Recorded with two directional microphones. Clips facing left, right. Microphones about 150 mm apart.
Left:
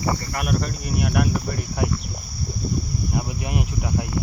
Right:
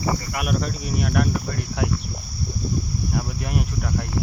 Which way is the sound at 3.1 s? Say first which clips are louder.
Even; 5° left (ahead or behind).